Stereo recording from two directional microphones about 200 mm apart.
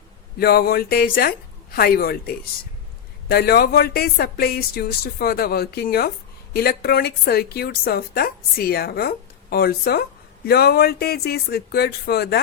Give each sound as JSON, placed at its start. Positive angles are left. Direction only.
{"t": 0.3, "sound": "a woman's voice", "side_deg": 50}